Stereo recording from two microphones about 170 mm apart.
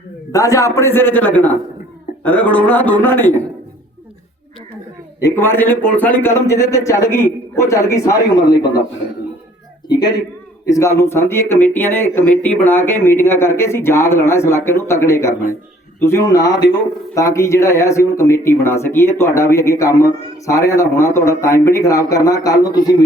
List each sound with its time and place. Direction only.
0.3 s a man's voice: 20° left (ahead or behind)
5.2 s a man's voice: 15° left (ahead or behind)
10.0 s a woman's voice: 25° left (ahead or behind)